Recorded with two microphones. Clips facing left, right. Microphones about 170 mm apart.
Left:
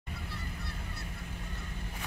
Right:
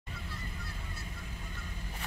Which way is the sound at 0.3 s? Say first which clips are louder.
Left 1 dB; 65° left (ahead or behind).